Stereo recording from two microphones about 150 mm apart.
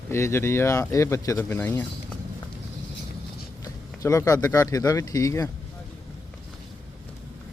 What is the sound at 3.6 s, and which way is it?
Speech, 20° left (ahead or behind).